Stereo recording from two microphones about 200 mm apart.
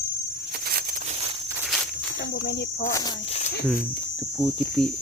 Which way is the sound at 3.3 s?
35° left (ahead or behind).